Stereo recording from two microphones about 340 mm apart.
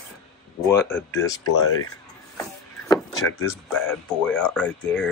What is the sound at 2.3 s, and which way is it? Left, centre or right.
Vehicle, centre.